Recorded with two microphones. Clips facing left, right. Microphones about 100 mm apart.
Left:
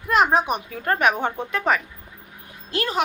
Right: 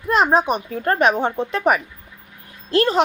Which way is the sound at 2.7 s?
35° right (ahead or behind).